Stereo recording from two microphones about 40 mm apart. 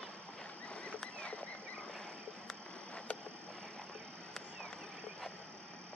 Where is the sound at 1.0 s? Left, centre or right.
Left.